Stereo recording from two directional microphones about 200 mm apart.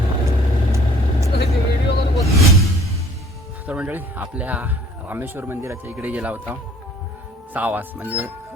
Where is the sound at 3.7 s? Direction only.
5° right (ahead or behind).